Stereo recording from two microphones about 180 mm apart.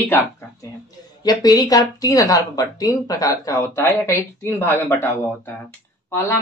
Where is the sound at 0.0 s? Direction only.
10° left (ahead or behind).